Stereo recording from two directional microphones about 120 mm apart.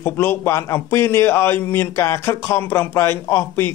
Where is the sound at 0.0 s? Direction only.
20° left (ahead or behind).